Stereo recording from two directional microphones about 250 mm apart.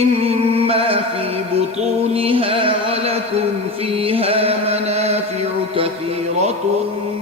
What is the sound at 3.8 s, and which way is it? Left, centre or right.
Chant, right.